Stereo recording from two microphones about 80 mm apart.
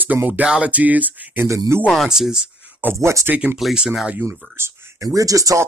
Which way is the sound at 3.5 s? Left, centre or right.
Centre.